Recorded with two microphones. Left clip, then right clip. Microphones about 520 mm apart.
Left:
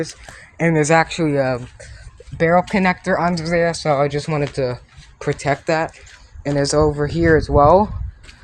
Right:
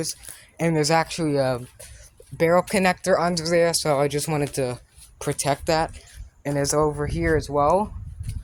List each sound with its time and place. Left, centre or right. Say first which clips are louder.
0.0 s speech: left 4 dB; right